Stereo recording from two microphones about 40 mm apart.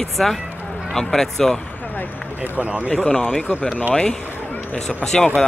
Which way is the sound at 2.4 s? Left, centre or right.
Right.